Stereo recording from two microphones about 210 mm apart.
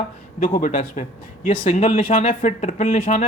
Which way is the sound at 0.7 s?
25° left (ahead or behind).